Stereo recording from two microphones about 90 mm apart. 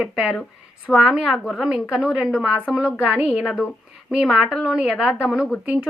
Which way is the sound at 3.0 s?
15° right (ahead or behind).